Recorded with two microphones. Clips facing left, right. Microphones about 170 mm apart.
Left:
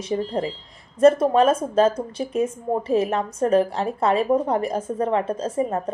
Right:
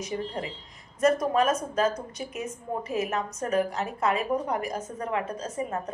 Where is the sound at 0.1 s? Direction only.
35° left (ahead or behind).